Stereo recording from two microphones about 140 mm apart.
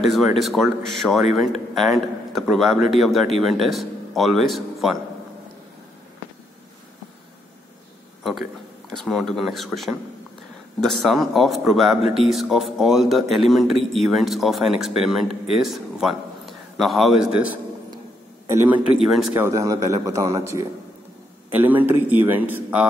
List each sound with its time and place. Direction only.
0.0 s speech: centre (ahead or behind)
8.2 s a man's voice: centre (ahead or behind)
18.5 s speech: 20° right (ahead or behind)
18.9 s speech: centre (ahead or behind)
19.3 s a man's voice: 20° right (ahead or behind)